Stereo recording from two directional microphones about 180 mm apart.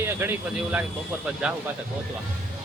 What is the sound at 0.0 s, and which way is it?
A man's voice, 15° right (ahead or behind).